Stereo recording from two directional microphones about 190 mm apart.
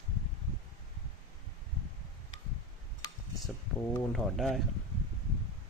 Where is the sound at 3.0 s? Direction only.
20° left (ahead or behind).